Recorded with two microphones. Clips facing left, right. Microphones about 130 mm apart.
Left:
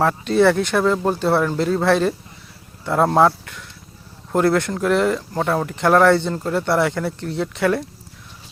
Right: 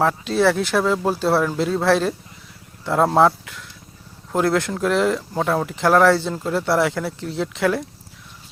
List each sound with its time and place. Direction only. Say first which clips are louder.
0.0 s speech: left 2 dB; centre (ahead or behind)